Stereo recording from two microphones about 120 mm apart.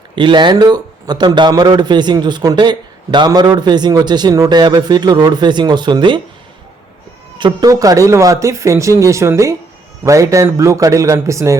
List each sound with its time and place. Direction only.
0.2 s a man's voice: 40° right (ahead or behind)
7.3 s speech: 35° right (ahead or behind)